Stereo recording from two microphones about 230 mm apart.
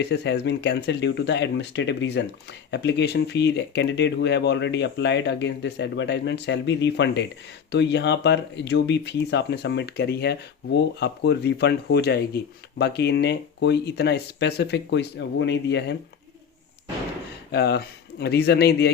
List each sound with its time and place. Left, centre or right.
0.0 s speech: left
17.5 s speech: left